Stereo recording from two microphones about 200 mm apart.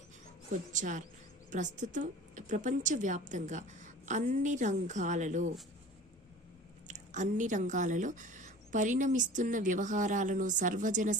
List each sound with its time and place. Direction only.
0.7 s speech: 40° right (ahead or behind)
6.8 s speech: 35° right (ahead or behind)